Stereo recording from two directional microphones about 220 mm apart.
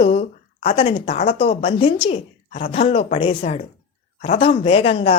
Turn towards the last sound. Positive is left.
turn(degrees=25)  # may be behind; listen again after turning